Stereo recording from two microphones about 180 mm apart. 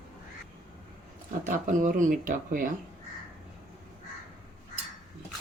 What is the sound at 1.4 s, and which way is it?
Speech, 45° right (ahead or behind).